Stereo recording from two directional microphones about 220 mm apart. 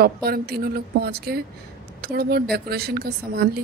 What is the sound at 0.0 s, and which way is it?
A woman's voice, 45° right (ahead or behind).